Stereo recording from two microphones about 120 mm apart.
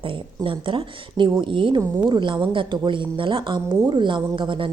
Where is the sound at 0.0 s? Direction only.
45° right (ahead or behind).